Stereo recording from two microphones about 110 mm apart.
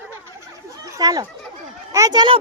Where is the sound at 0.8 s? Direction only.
35° right (ahead or behind).